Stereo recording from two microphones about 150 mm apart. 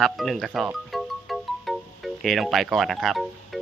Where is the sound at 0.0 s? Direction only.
Centre (ahead or behind).